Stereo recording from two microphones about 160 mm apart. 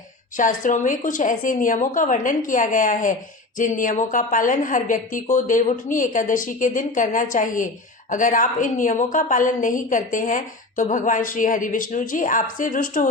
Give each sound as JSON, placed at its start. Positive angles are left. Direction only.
{"t": 0.3, "sound": "a woman's voice", "side_deg": 55}